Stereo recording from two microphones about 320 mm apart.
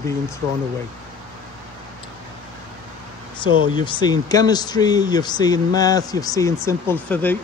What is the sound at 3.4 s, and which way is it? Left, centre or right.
Speech, centre.